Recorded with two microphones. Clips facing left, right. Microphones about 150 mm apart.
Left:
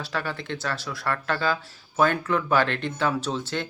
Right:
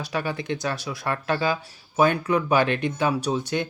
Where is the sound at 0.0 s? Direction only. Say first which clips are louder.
Right 3 dB; 15° right (ahead or behind).